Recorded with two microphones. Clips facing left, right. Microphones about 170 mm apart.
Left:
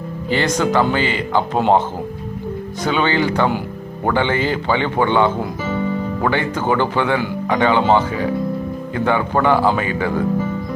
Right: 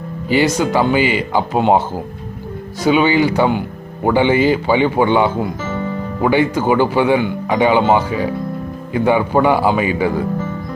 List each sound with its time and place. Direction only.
0.3 s speech: 10° right (ahead or behind)
2.8 s speech: 10° right (ahead or behind)